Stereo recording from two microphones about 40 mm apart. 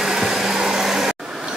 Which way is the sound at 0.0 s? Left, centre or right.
Centre.